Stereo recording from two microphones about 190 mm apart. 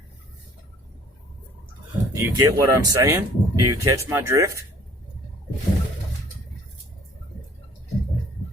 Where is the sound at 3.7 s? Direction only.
15° right (ahead or behind).